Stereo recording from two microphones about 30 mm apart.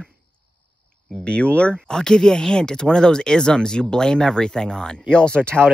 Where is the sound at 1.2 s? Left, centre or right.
Left.